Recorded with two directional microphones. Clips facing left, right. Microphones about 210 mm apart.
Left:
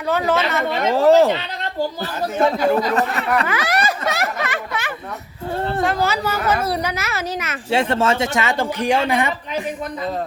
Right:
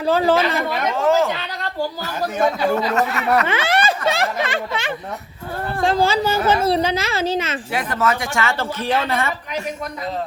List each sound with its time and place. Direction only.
0.0 s speech: 30° right (ahead or behind)
0.7 s speech: 30° left (ahead or behind)
2.7 s speech: 35° left (ahead or behind)
3.4 s a child's voice: 25° right (ahead or behind)
5.5 s speech: 25° left (ahead or behind)
5.8 s a child's voice: 30° right (ahead or behind)
7.7 s speech: 25° left (ahead or behind)